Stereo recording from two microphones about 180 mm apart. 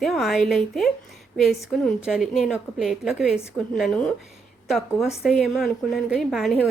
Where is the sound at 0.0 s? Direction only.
Centre (ahead or behind).